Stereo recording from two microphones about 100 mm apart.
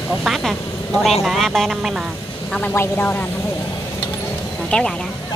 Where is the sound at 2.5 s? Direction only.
10° left (ahead or behind).